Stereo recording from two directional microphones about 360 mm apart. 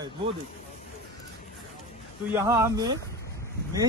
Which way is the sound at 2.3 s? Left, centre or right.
Centre.